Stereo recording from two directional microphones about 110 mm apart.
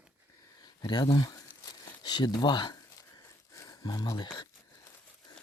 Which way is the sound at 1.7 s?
40° left (ahead or behind).